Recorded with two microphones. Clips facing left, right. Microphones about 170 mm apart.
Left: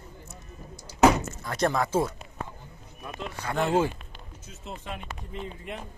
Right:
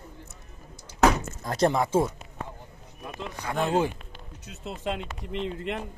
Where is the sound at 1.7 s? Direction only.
20° right (ahead or behind).